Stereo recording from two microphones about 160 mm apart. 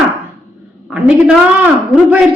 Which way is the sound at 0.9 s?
5° right (ahead or behind).